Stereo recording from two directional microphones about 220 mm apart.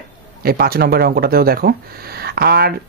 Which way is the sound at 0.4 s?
45° right (ahead or behind).